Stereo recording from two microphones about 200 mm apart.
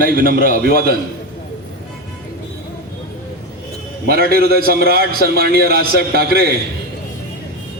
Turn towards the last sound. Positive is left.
turn(degrees=-50)  # may be behind; listen again after turning